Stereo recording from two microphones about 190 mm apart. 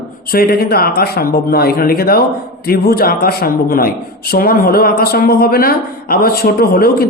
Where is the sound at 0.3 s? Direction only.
50° left (ahead or behind).